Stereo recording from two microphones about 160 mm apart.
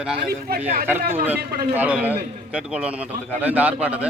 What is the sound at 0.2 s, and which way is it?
Speech, 70° right (ahead or behind).